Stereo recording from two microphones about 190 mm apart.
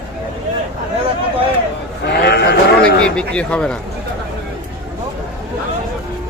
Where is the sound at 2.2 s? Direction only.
60° left (ahead or behind).